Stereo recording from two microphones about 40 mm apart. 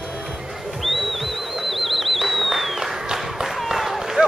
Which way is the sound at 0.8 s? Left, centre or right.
Centre.